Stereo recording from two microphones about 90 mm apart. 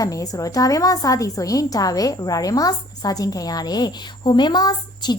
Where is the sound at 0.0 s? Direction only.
40° left (ahead or behind).